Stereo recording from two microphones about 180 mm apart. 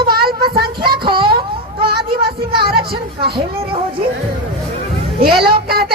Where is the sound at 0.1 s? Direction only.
55° right (ahead or behind).